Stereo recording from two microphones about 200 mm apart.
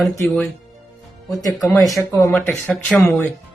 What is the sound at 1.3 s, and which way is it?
Speech, 15° left (ahead or behind).